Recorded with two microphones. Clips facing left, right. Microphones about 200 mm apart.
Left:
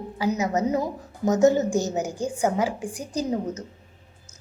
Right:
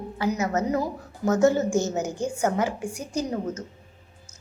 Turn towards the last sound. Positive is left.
turn(degrees=15)  # may be behind; listen again after turning